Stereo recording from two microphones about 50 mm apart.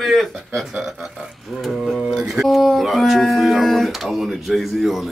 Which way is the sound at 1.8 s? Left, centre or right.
Centre.